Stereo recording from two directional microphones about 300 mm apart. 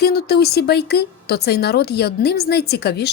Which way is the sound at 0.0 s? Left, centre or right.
Left.